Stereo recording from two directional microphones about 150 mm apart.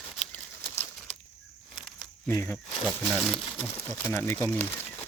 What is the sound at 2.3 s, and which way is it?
Speech, 15° left (ahead or behind).